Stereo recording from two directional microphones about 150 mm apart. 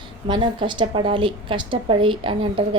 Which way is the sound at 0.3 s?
30° right (ahead or behind).